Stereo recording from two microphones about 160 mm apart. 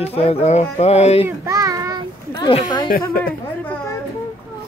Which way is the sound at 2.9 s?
65° left (ahead or behind).